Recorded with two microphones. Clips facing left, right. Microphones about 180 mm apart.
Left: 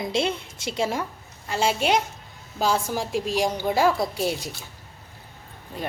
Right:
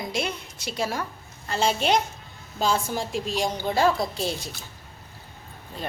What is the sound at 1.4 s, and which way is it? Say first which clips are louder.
A woman's voice: left 1 dB; 10° left (ahead or behind).